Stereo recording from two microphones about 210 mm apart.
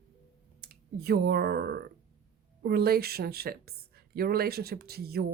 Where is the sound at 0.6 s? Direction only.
50° right (ahead or behind).